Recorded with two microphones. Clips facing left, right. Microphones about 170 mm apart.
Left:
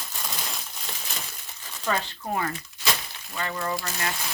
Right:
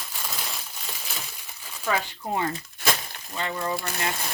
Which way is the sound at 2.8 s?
55° right (ahead or behind).